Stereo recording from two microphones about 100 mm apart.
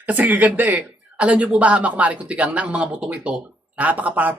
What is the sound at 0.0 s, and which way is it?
Speech, 15° right (ahead or behind).